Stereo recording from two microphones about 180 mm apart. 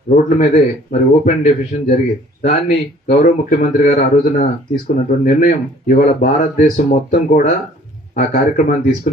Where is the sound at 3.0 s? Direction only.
40° left (ahead or behind).